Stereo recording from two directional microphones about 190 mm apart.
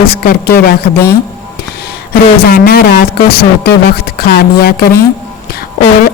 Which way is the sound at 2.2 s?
50° left (ahead or behind).